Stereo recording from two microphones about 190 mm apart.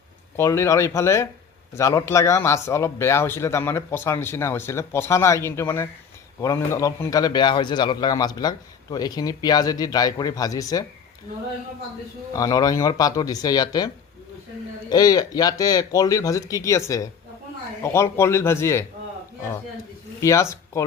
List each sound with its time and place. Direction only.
0.3 s a man's voice: 15° left (ahead or behind)
12.3 s a man's voice: 20° left (ahead or behind)
20.2 s a man's voice: 15° left (ahead or behind)